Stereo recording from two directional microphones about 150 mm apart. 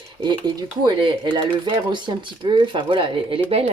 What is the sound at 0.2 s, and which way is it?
Speech, 35° right (ahead or behind).